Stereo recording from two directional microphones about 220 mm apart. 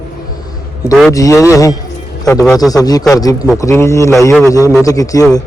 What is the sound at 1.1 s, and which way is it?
A man's voice, 15° left (ahead or behind).